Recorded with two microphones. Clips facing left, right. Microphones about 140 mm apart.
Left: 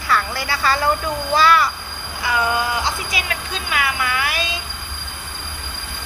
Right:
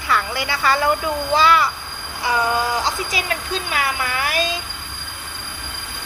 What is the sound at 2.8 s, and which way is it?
Speech, 40° right (ahead or behind).